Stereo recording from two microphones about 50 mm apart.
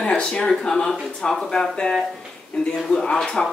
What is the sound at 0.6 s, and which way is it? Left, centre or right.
A woman's voice, centre.